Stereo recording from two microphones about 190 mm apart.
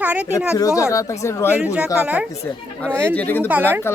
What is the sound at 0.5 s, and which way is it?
Speech, 15° left (ahead or behind).